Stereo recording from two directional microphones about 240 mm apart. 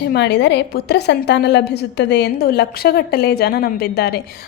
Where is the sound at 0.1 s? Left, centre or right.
Left.